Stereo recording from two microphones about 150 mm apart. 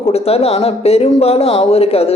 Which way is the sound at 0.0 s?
40° left (ahead or behind).